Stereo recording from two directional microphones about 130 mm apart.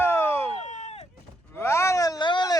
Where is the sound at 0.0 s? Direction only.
20° left (ahead or behind).